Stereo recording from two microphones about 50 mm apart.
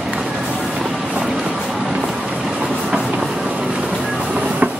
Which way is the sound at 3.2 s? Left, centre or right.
Centre.